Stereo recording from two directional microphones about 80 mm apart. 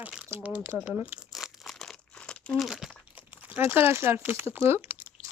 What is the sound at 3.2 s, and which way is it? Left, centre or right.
Crunch, centre.